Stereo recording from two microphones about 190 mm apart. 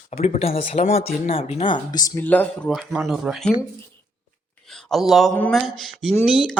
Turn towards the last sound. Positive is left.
turn(degrees=0)  # may be behind; listen again after turning